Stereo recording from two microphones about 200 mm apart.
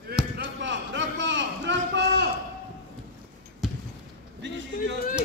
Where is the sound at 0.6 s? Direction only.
65° right (ahead or behind).